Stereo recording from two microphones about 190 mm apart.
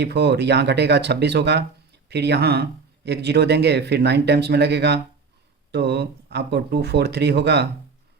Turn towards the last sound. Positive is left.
turn(degrees=-60)  # may be behind; listen again after turning